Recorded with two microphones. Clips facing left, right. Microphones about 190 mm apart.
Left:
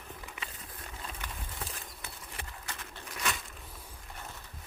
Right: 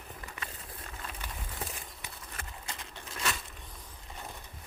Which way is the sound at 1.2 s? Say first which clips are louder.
Right 1 dB; 15° right (ahead or behind).